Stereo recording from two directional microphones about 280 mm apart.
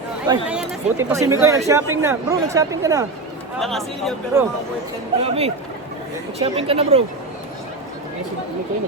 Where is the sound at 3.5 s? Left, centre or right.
Centre.